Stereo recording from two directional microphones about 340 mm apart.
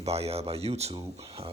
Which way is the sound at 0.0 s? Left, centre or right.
Centre.